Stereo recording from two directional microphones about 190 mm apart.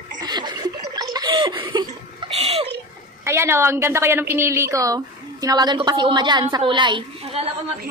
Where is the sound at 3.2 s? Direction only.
15° right (ahead or behind).